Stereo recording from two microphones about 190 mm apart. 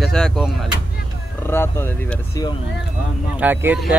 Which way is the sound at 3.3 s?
10° right (ahead or behind).